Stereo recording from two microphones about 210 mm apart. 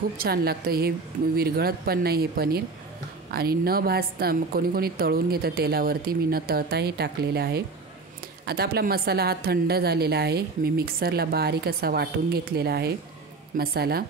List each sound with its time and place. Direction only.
0.2 s a woman's voice: 45° right (ahead or behind)